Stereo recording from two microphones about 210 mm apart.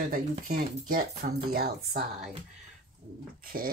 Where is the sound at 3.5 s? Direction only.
45° right (ahead or behind).